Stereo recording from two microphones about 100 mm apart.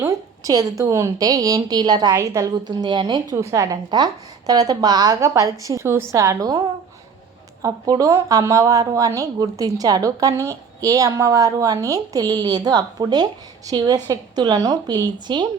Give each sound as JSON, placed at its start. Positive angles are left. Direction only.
{"t": 0.0, "sound": "a woman's voice", "side_deg": -35}
{"t": 2.1, "sound": "a woman's voice", "side_deg": -30}
{"t": 2.6, "sound": "a woman's voice", "side_deg": -45}
{"t": 3.3, "sound": "a woman's voice", "side_deg": -30}
{"t": 7.6, "sound": "a woman's voice", "side_deg": -35}